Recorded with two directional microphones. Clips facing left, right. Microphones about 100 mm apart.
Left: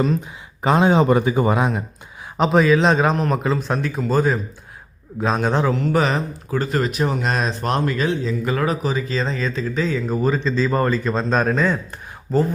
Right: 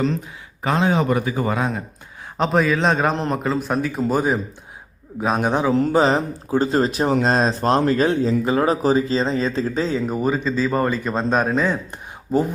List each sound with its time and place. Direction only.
0.6 s a man's voice: 25° left (ahead or behind)
2.4 s a man's voice: centre (ahead or behind)
4.1 s a man's voice: 15° right (ahead or behind)
5.9 s speech: 30° right (ahead or behind)
10.1 s a man's voice: 10° right (ahead or behind)